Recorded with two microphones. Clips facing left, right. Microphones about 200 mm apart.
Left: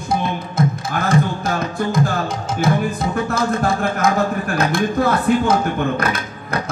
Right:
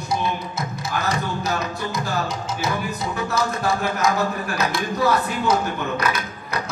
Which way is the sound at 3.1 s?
50° left (ahead or behind).